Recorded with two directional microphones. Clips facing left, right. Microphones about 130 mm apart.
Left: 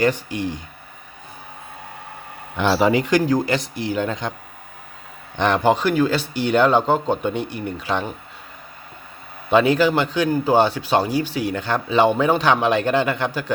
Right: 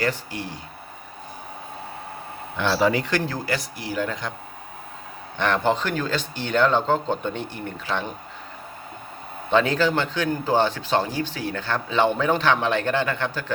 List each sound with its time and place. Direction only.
0.0 s speech: 20° left (ahead or behind)
2.6 s a man's voice: 15° left (ahead or behind)
5.4 s a man's voice: 15° left (ahead or behind)
9.5 s a man's voice: 10° left (ahead or behind)